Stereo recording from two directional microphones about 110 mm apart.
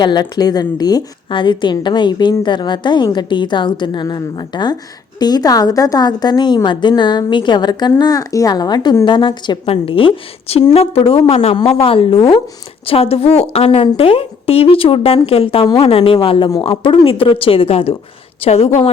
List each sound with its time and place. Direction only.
0.0 s a woman's voice: 40° left (ahead or behind)
9.6 s a woman's voice: 55° left (ahead or behind)